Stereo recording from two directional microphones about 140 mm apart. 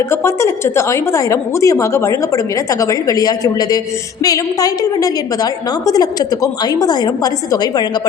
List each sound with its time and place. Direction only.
0.0 s a woman's voice: 20° left (ahead or behind)